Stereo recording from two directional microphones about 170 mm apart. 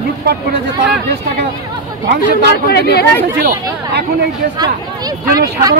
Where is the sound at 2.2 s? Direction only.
75° left (ahead or behind).